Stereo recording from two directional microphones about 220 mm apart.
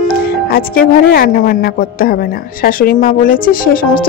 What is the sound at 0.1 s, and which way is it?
Speech, 40° left (ahead or behind).